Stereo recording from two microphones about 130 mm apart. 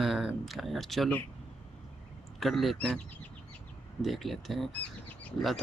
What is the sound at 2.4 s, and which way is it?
Speech, centre (ahead or behind).